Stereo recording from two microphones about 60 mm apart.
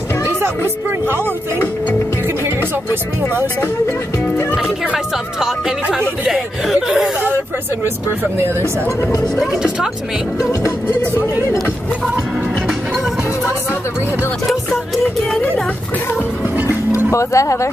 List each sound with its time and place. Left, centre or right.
0.8 s speech: right
4.9 s speech: centre
7.8 s speech: right
9.4 s speech: centre
10.4 s speech: left
17.1 s speech: left